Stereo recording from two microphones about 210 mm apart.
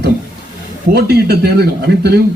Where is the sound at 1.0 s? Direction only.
50° right (ahead or behind).